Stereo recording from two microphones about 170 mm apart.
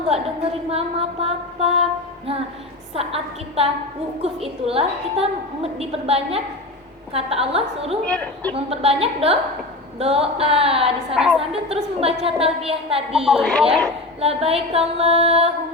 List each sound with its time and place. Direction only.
0.7 s a woman's voice: 35° right (ahead or behind)
8.0 s a woman's voice: 5° left (ahead or behind)
8.5 s a woman's voice: 35° right (ahead or behind)
11.1 s a woman's voice: 5° right (ahead or behind)
11.3 s a woman's voice: 35° right (ahead or behind)
13.1 s a woman's voice: centre (ahead or behind)
14.2 s a woman's voice: 35° right (ahead or behind)